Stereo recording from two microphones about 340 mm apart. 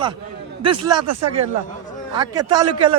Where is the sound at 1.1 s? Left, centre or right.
Right.